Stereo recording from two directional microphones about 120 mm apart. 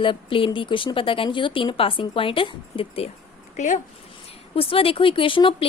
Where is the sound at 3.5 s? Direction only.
90° left.